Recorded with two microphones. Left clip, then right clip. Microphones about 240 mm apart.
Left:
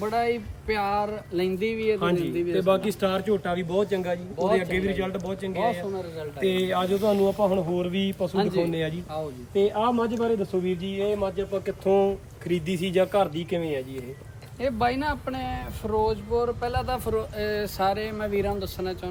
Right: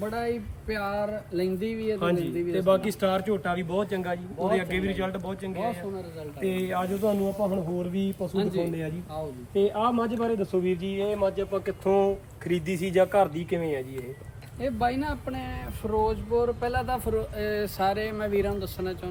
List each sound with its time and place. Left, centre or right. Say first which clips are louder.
0.1 s a sound: left 5 dB; centre
2.0 s speech: left 2 dB; centre
15.1 s speech: left 4 dB; centre